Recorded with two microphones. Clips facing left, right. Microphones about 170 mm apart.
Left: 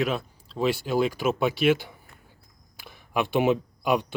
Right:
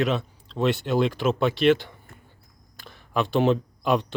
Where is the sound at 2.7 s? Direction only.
10° left (ahead or behind).